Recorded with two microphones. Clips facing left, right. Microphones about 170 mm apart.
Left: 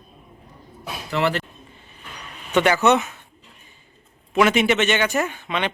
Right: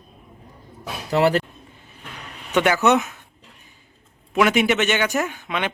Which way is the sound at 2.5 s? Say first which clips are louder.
Left 1 dB; 5° right (ahead or behind).